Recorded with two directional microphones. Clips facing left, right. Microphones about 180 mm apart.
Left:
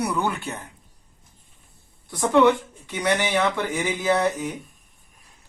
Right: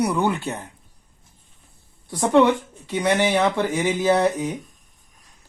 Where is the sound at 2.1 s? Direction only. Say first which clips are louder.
Right 1 dB; 30° right (ahead or behind).